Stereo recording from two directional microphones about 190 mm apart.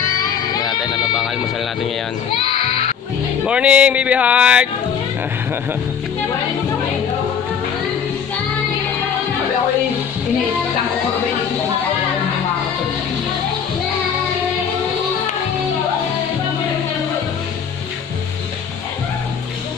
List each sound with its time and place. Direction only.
0.2 s music: 20° left (ahead or behind)
3.4 s music: 5° right (ahead or behind)